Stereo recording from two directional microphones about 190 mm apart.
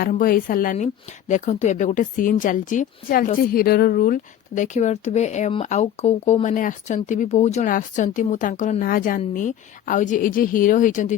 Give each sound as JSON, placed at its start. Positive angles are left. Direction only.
{"t": 0.0, "sound": "a woman's voice", "side_deg": 50}